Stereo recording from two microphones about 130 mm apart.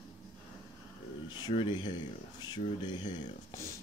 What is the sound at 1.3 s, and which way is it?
Speech, 40° left (ahead or behind).